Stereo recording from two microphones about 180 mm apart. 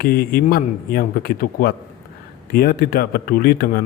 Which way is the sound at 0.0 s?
60° left (ahead or behind).